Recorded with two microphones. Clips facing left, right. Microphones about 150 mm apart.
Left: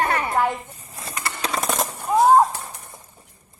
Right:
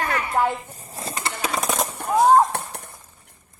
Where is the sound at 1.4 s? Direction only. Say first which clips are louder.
Even; 5° right (ahead or behind).